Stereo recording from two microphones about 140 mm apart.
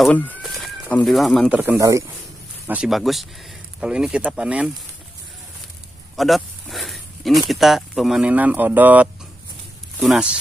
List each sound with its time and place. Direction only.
0.0 s speech: 10° left (ahead or behind)
0.4 s bird: centre (ahead or behind)
1.0 s speech: centre (ahead or behind)
1.5 s speech: 15° right (ahead or behind)
2.6 s speech: 10° right (ahead or behind)
2.9 s speech: centre (ahead or behind)
6.1 s speech: centre (ahead or behind)